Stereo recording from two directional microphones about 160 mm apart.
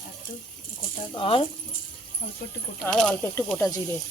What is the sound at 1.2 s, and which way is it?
Speech, 35° left (ahead or behind).